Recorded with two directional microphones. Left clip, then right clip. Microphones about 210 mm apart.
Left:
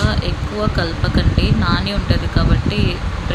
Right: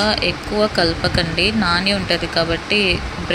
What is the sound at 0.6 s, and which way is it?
Speech, 15° right (ahead or behind).